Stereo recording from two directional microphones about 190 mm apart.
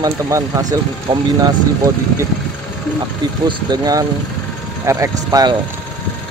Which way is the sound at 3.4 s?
25° right (ahead or behind).